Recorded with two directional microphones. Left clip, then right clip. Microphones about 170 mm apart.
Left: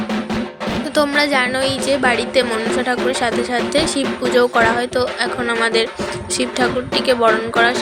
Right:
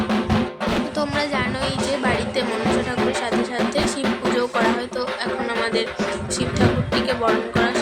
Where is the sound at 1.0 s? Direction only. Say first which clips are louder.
Left 11 dB; 40° left (ahead or behind).